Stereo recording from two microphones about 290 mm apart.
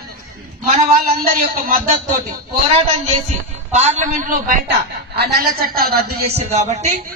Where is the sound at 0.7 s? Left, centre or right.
Right.